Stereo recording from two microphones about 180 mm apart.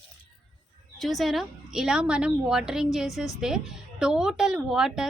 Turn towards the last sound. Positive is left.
turn(degrees=-5)  # may be behind; listen again after turning